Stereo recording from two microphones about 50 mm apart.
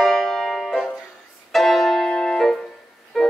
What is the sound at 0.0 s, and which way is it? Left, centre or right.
Music, centre.